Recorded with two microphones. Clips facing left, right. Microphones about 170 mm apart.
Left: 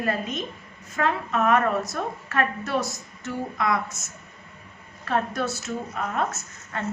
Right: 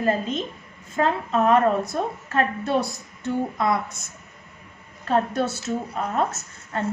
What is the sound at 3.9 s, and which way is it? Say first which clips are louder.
Speech: even; 60° right (ahead or behind).